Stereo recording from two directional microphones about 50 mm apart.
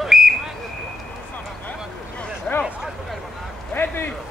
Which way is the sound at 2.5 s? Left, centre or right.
Left.